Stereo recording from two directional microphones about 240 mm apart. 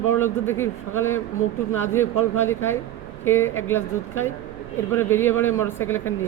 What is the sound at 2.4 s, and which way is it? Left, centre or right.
Speech, centre.